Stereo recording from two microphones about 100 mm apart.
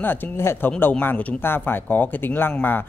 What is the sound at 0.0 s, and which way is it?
Speech, 20° left (ahead or behind).